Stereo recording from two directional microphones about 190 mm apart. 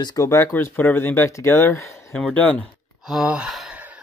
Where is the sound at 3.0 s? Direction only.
5° right (ahead or behind).